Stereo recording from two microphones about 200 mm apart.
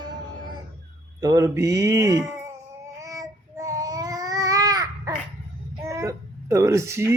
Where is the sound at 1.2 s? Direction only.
20° right (ahead or behind).